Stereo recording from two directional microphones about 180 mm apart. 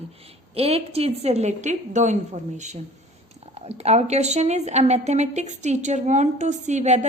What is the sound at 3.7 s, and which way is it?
A woman's voice, 35° right (ahead or behind).